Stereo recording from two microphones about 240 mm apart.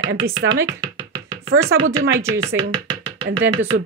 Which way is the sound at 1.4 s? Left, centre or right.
Right.